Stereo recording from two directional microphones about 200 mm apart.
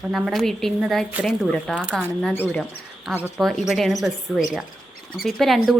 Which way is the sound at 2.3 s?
10° left (ahead or behind).